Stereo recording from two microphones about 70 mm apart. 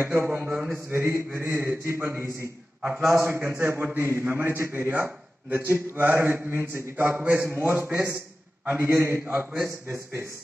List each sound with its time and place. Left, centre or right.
0.0 s a man's voice: right
0.5 s a man's voice: centre
0.7 s mantra: right
3.3 s a man's voice: right
7.9 s a man's voice: centre
8.6 s mantra: right